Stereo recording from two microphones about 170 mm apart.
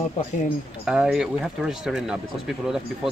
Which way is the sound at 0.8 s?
5° right (ahead or behind).